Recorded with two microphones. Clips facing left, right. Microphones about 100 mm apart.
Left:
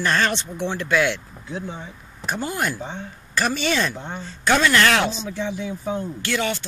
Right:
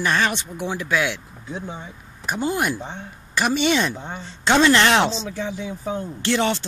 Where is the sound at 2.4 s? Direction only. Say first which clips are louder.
Right 4 dB; 20° right (ahead or behind).